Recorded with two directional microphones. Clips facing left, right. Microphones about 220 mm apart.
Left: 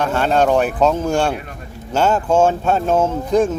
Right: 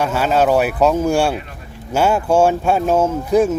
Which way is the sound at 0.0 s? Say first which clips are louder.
Even; 5° right (ahead or behind).